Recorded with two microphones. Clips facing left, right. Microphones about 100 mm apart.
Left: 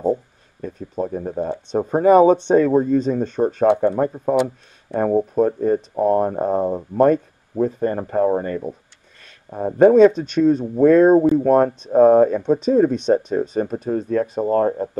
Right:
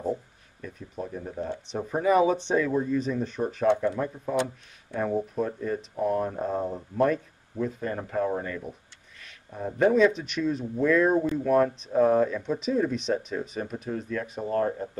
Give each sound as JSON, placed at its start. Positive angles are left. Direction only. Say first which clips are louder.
{"t": 0.0, "sound": "a sound", "louder": "left 9 dB", "side_deg": 40}
{"t": 1.7, "sound": "speech", "louder": "left 10 dB", "side_deg": 40}
{"t": 3.7, "sound": "speech", "louder": "left 8 dB", "side_deg": 50}